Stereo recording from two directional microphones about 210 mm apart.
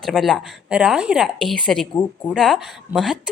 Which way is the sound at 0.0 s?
Centre (ahead or behind).